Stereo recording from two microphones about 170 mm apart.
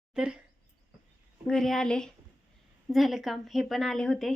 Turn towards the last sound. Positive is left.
turn(degrees=0)  # may be behind; listen again after turning